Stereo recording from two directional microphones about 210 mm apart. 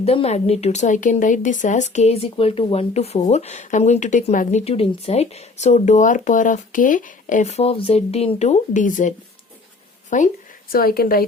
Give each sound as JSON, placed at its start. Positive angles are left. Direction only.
{"t": 0.0, "sound": "a woman's voice", "side_deg": 30}